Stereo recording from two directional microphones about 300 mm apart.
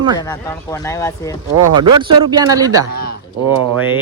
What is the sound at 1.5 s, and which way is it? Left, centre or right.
Speech, right.